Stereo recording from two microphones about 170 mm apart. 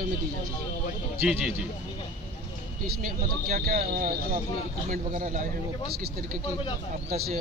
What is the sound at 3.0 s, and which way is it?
Speech, 60° right (ahead or behind).